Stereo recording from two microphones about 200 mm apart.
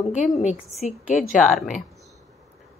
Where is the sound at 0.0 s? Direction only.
35° left (ahead or behind).